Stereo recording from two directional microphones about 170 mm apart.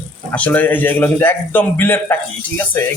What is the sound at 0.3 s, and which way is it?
A man's voice, 10° left (ahead or behind).